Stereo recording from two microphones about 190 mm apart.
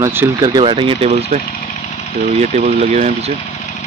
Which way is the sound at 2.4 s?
35° right (ahead or behind).